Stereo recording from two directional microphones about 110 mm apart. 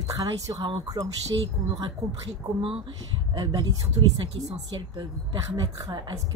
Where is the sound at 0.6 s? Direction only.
50° right (ahead or behind).